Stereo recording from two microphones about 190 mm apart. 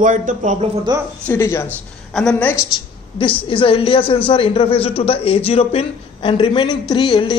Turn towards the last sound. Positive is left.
turn(degrees=25)  # may be behind; listen again after turning